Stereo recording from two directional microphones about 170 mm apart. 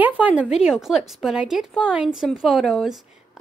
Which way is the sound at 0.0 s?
10° right (ahead or behind).